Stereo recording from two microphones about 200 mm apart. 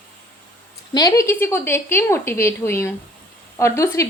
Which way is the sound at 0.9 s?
15° left (ahead or behind).